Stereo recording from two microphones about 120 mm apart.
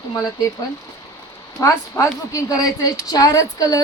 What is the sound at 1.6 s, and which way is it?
A woman's voice, 25° left (ahead or behind).